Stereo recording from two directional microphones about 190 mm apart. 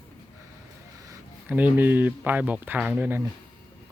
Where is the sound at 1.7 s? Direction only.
10° right (ahead or behind).